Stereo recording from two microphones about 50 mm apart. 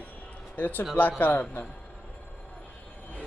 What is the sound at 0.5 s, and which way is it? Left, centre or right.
Speech, left.